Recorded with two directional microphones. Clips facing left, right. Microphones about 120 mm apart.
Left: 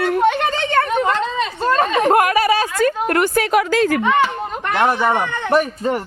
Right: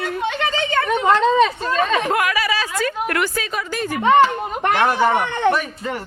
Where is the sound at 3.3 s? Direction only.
70° left (ahead or behind); by 4.0 s 90° left.